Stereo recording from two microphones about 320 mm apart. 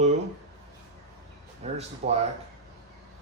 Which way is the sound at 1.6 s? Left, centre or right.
Centre.